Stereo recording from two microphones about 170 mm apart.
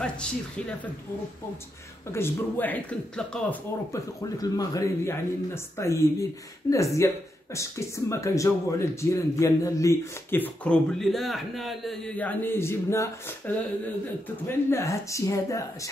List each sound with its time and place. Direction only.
0.0 s speech: 5° left (ahead or behind)
2.0 s speech: 15° left (ahead or behind)
3.9 s speech: 20° left (ahead or behind)
14.5 s speech: 15° left (ahead or behind)